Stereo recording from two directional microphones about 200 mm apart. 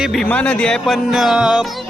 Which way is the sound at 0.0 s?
Centre (ahead or behind).